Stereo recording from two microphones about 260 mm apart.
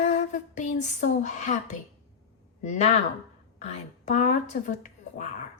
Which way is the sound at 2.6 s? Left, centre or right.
Left.